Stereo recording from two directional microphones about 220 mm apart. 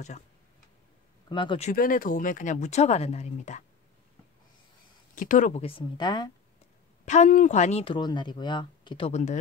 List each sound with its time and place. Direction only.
1.3 s speech: 20° left (ahead or behind)
1.7 s speech: 40° left (ahead or behind)
5.1 s speech: 35° left (ahead or behind)
5.7 s speech: 20° left (ahead or behind)
7.1 s speech: 35° left (ahead or behind)